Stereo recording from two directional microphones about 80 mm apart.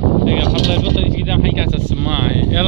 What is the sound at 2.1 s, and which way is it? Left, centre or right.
Speech, centre.